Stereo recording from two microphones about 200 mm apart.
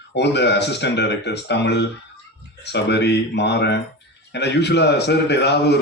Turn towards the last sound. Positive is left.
turn(degrees=55)  # may be behind; listen again after turning